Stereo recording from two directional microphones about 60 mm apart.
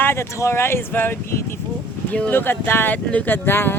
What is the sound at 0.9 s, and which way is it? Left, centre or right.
Speech, left.